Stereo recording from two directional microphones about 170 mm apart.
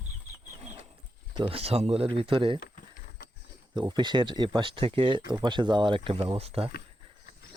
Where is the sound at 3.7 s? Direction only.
25° right (ahead or behind).